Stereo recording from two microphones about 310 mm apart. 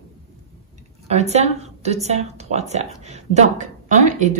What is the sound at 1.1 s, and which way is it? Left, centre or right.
A woman's voice, right.